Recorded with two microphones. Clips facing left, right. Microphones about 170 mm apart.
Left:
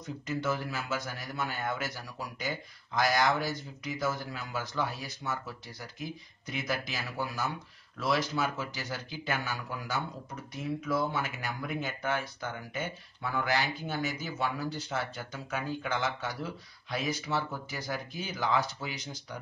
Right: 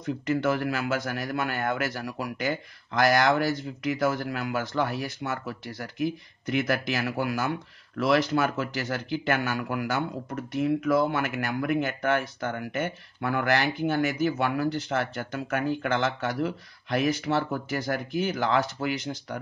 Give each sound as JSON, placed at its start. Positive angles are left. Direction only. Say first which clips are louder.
{"t": 0.0, "sound": "a man's voice", "louder": "right 8 dB", "side_deg": -60}